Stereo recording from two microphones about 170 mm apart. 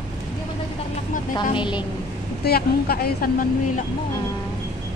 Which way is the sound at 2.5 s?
65° left (ahead or behind).